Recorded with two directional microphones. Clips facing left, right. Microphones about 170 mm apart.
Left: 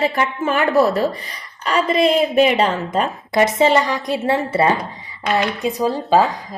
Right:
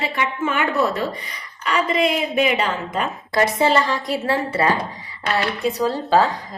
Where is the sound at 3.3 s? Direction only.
20° left (ahead or behind).